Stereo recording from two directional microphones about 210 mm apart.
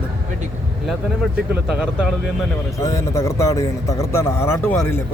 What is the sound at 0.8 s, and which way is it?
Speech, centre (ahead or behind).